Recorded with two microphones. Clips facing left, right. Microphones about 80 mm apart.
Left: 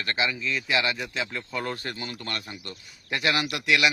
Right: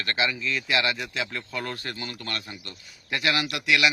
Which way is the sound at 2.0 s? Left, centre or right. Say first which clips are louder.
Even; left.